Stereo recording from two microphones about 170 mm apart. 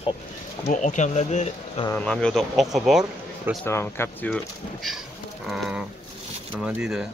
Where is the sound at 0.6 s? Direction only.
45° left (ahead or behind).